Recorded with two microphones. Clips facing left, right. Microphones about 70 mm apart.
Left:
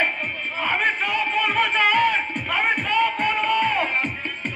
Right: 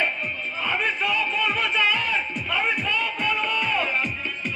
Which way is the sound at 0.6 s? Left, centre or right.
Left.